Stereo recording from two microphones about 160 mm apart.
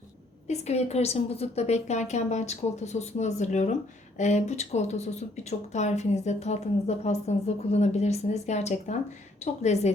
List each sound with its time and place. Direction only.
0.4 s speech: 45° left (ahead or behind)